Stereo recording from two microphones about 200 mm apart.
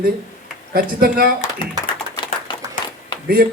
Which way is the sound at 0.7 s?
45° right (ahead or behind).